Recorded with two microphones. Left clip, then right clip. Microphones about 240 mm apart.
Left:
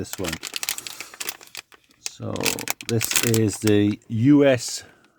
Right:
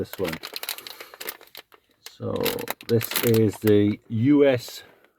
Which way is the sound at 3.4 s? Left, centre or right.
Left.